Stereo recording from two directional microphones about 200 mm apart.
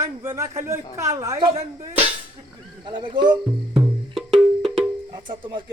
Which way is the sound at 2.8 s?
25° right (ahead or behind).